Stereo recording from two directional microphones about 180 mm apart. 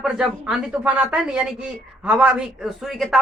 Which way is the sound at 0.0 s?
Centre (ahead or behind).